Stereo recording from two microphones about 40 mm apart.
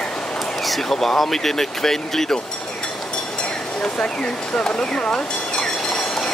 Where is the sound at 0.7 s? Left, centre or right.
Centre.